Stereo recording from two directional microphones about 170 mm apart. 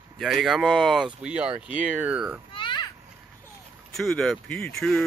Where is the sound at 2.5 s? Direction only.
30° left (ahead or behind).